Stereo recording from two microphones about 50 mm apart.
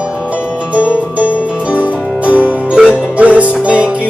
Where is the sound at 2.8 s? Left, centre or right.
Centre.